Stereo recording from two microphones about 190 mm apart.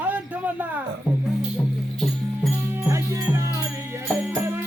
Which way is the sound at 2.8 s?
15° right (ahead or behind).